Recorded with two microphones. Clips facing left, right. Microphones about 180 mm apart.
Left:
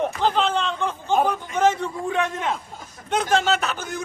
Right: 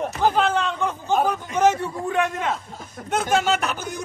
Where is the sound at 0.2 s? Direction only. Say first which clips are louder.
Right 4 dB; 10° right (ahead or behind).